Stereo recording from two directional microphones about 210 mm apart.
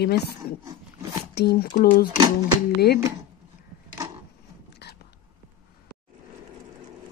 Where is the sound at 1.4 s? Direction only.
50° left (ahead or behind).